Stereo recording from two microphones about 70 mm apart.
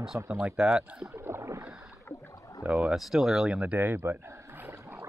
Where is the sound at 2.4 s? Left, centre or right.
Left.